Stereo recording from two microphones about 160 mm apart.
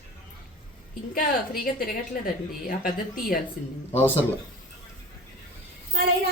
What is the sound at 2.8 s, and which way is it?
Speech, 65° left (ahead or behind).